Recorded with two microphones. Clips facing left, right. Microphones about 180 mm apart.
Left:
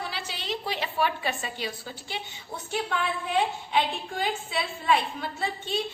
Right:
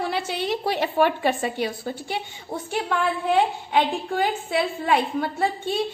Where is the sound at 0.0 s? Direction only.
55° right (ahead or behind).